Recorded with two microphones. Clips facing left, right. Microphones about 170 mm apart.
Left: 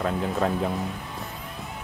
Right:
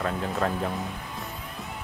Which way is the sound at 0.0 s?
5° left (ahead or behind).